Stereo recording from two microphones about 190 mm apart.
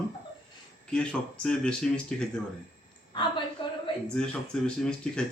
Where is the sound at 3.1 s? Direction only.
25° left (ahead or behind).